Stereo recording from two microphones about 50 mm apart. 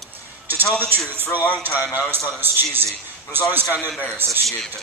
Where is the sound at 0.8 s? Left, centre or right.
Right.